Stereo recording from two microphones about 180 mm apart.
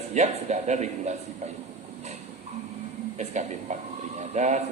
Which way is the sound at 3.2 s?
40° right (ahead or behind).